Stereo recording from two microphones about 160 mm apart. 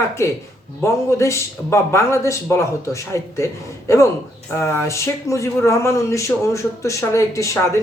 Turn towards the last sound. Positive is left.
turn(degrees=20)  # may be behind; listen again after turning